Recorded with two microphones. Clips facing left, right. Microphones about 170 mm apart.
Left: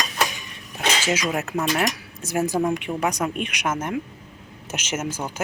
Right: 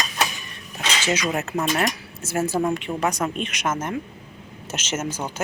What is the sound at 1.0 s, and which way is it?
Speech, 10° left (ahead or behind).